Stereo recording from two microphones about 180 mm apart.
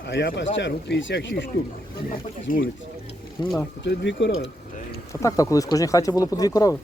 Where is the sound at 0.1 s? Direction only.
80° left.